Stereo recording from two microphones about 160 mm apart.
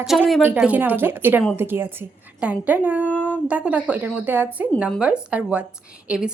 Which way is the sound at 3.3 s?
10° right (ahead or behind).